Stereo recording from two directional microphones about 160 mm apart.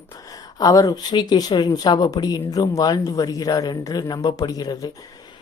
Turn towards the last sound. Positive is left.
turn(degrees=25)  # may be behind; listen again after turning